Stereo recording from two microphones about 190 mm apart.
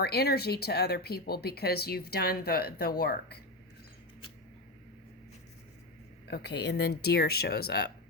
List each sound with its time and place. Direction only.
0.0 s speech: 55° left (ahead or behind)
6.2 s speech: 60° left (ahead or behind)